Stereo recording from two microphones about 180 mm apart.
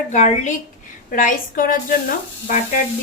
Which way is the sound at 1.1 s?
50° left (ahead or behind).